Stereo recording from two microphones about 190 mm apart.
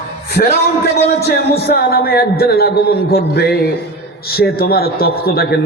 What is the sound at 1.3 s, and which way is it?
A man's voice, 55° left (ahead or behind).